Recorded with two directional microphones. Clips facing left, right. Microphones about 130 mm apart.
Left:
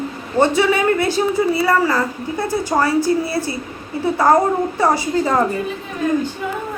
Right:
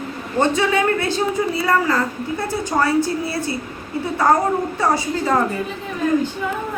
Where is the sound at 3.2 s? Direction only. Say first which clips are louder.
Left 2 dB; 40° left (ahead or behind).